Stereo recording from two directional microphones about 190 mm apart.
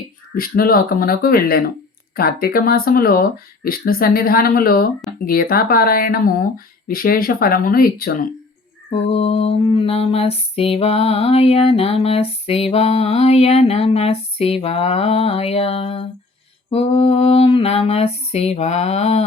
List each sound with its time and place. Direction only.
0.3 s speech: 50° left (ahead or behind)
9.1 s lullaby: 35° left (ahead or behind)